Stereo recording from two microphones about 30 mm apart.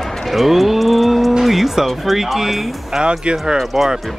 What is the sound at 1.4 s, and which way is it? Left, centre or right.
Speech, centre.